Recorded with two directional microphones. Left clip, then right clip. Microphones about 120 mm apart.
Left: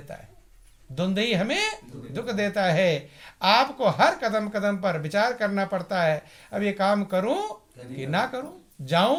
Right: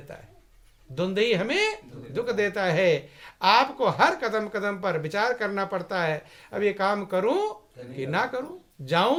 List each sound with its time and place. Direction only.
0.1 s speech: 40° right (ahead or behind)